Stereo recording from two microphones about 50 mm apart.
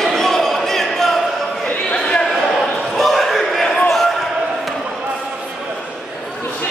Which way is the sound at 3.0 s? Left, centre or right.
Centre.